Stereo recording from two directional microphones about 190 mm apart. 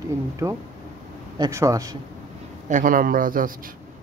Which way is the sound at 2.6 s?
40° right (ahead or behind).